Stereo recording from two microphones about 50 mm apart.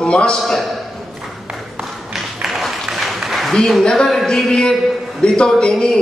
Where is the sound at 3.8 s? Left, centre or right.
Centre.